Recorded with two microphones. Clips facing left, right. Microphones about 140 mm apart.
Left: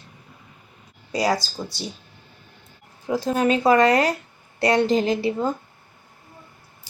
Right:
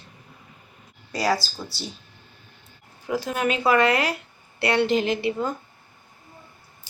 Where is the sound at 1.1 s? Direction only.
20° left (ahead or behind).